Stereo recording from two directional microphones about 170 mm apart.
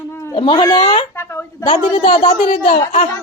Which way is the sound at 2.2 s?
50° left (ahead or behind).